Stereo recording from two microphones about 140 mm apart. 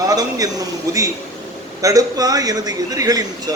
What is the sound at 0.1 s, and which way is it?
A man's voice, 25° right (ahead or behind).